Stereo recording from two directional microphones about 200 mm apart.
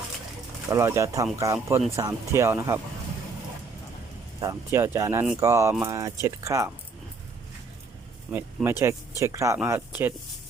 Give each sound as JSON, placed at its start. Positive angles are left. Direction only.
{"t": 0.7, "sound": "speech", "side_deg": -15}
{"t": 4.4, "sound": "speech", "side_deg": -15}
{"t": 8.3, "sound": "speech", "side_deg": -10}